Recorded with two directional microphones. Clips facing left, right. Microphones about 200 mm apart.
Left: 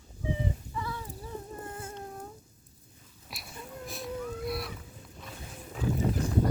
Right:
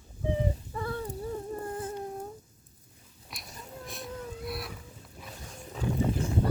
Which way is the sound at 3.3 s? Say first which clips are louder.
Left 1 dB; 5° left (ahead or behind).